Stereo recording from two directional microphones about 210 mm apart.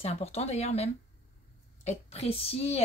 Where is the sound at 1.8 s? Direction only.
30° left (ahead or behind).